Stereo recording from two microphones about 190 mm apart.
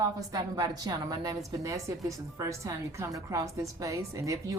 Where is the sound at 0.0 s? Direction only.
20° right (ahead or behind).